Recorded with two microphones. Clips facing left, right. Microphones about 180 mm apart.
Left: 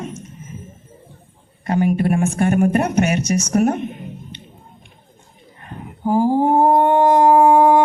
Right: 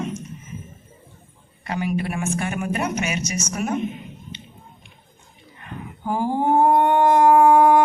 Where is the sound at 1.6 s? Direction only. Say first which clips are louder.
Left 7 dB; 45° left (ahead or behind).